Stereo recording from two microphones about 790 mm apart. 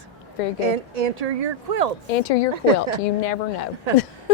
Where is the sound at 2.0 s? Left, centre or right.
Left.